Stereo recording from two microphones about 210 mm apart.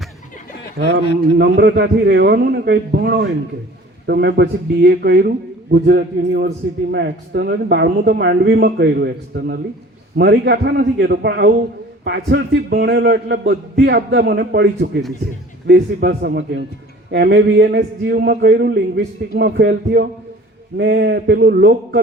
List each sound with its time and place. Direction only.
1.4 s a man's voice: 55° right (ahead or behind)